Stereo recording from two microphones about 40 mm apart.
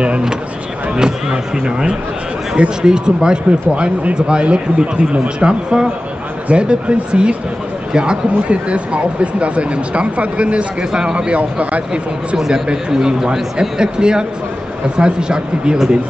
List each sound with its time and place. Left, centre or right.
0.9 s a man's voice: centre
12.4 s a man's voice: centre